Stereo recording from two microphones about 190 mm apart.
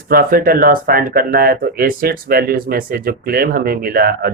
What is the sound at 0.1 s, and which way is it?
Speech, 50° right (ahead or behind).